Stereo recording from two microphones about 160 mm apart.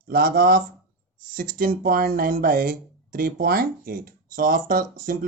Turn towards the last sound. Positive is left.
turn(degrees=-60)  # may be behind; listen again after turning